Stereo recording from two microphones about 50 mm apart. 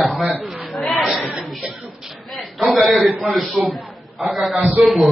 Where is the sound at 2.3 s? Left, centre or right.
Centre.